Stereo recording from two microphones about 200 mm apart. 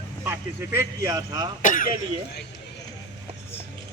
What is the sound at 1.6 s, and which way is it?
Speech, 40° left (ahead or behind).